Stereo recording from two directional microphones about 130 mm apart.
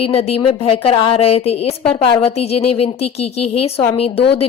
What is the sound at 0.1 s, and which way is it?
A woman's voice, 50° left (ahead or behind).